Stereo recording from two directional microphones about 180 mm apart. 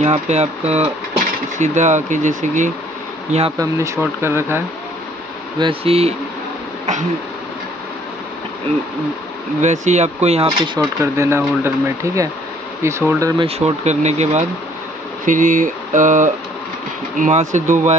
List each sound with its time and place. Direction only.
0.0 s speech: 40° right (ahead or behind)
3.5 s speech: 15° right (ahead or behind)
5.6 s speech: 30° right (ahead or behind)
9.6 s speech: 40° right (ahead or behind)
11.0 s speech: 15° right (ahead or behind)
13.4 s speech: 35° right (ahead or behind)